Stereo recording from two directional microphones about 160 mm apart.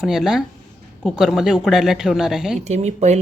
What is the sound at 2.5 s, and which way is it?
Speech, 45° right (ahead or behind).